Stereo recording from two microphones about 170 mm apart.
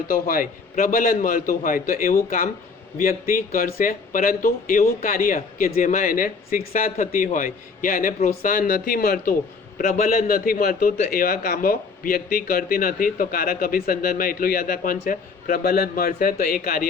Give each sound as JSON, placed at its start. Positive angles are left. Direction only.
{"t": 0.1, "sound": "a man's voice", "side_deg": 55}